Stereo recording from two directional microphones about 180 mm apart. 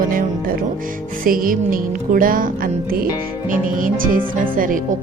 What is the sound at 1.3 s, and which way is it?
Music, 50° right (ahead or behind).